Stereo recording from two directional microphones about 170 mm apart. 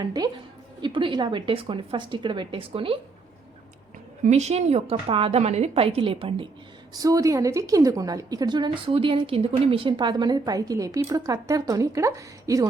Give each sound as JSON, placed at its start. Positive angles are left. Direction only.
{"t": 0.0, "sound": "a woman's voice", "side_deg": -25}
{"t": 4.2, "sound": "a woman's voice", "side_deg": -40}
{"t": 6.9, "sound": "a woman's voice", "side_deg": -20}